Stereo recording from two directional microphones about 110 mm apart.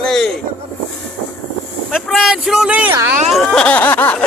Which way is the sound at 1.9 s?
Centre (ahead or behind).